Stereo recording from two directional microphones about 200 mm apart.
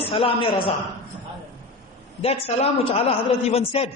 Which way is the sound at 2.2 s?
30° left (ahead or behind).